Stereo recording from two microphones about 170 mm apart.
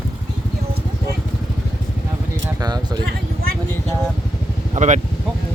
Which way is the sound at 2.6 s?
25° right (ahead or behind).